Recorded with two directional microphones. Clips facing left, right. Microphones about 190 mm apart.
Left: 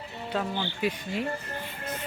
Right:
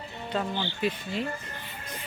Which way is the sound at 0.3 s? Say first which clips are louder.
Even; 5° left (ahead or behind).